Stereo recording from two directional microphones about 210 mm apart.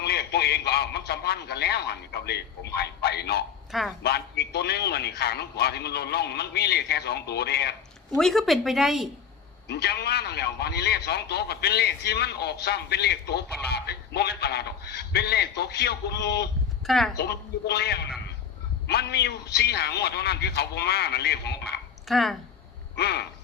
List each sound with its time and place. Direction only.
0.0 s a man's voice: 50° left (ahead or behind)
3.7 s speech: centre (ahead or behind)
4.0 s a man's voice: 50° left (ahead or behind)
8.2 s speech: centre (ahead or behind)
9.6 s a man's voice: 50° left (ahead or behind)
16.8 s speech: centre (ahead or behind)
17.2 s a man's voice: 50° left (ahead or behind)
22.0 s speech: centre (ahead or behind)
23.0 s a man's voice: 50° left (ahead or behind)